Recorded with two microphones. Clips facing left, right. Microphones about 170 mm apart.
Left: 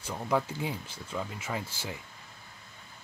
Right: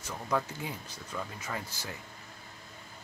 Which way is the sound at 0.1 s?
20° left (ahead or behind).